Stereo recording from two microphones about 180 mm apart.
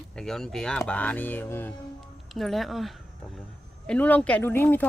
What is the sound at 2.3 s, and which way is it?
A woman's voice, centre (ahead or behind).